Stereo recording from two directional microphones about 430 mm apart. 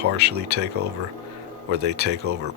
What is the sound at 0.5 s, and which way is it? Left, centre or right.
Speech, right.